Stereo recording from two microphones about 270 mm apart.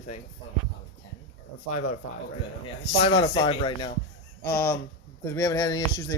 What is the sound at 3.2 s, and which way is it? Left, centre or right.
Speech, centre.